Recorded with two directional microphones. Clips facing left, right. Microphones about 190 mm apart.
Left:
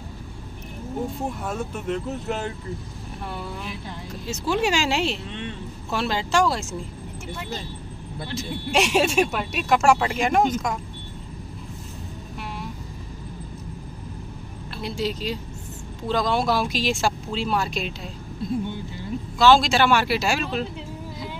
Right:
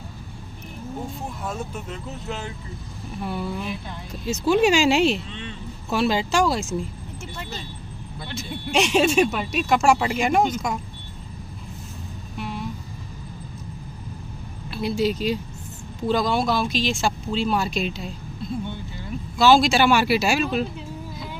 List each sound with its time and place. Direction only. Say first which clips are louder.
1.9 s speech: left 6 dB; 50° left (ahead or behind)
4.5 s speech: right 5 dB; 15° right (ahead or behind)
8.7 s speech: right 2 dB; 5° left (ahead or behind)
12.4 s vehicle: right 4 dB; centre (ahead or behind)
14.7 s a woman's voice: right 5 dB; 10° right (ahead or behind)
19.3 s speech: right 1 dB; 10° right (ahead or behind)